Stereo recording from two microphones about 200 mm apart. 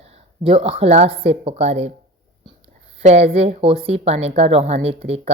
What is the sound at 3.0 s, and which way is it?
Speech, 30° right (ahead or behind).